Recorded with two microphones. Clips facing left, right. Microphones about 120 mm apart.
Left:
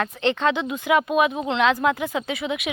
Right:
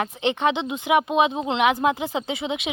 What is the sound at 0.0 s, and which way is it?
Speech, 15° right (ahead or behind).